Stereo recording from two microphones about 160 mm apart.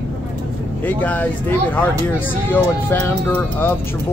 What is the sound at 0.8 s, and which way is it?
Speech, 10° left (ahead or behind).